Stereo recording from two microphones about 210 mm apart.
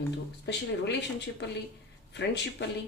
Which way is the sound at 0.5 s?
55° left (ahead or behind).